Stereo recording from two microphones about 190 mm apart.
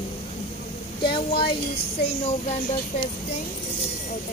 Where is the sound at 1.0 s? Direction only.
25° left (ahead or behind).